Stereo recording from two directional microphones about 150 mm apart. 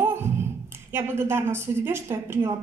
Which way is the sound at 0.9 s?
15° right (ahead or behind).